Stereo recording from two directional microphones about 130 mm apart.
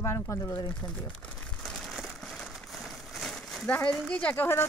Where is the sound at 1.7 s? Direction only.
Centre (ahead or behind).